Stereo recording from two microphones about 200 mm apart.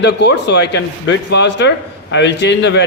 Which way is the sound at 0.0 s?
60° left (ahead or behind).